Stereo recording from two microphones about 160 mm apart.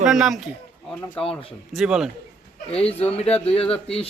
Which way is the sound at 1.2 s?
35° left (ahead or behind).